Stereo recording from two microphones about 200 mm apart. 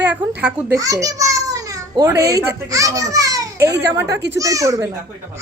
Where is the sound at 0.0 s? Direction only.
10° right (ahead or behind).